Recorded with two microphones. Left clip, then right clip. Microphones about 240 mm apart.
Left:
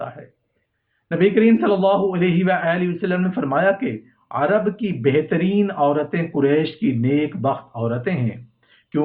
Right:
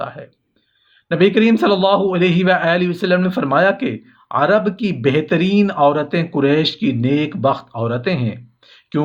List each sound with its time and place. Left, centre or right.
1.0 s a man's voice: right